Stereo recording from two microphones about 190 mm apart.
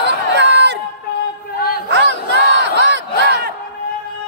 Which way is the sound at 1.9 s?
70° right (ahead or behind).